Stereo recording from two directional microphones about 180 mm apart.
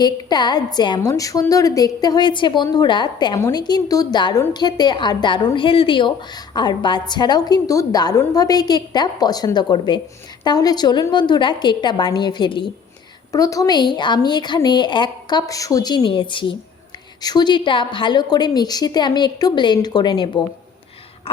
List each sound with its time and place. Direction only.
0.0 s a woman's voice: 25° left (ahead or behind)